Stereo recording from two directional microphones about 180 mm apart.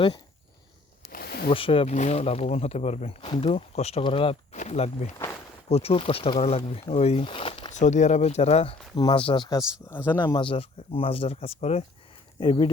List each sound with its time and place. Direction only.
1.1 s a sound: 60° left (ahead or behind)
1.5 s speech: 30° left (ahead or behind)
5.1 s a sound: 15° left (ahead or behind)
5.6 s speech: 35° left (ahead or behind)
7.7 s speech: 40° left (ahead or behind); by 9.6 s 25° left (ahead or behind)
9.8 s speech: 10° left (ahead or behind)
10.2 s speech: 25° left (ahead or behind)